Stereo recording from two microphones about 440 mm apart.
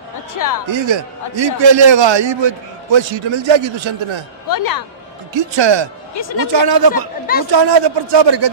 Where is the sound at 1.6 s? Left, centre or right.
Right.